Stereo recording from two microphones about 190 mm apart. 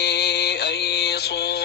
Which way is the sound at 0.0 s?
60° left (ahead or behind).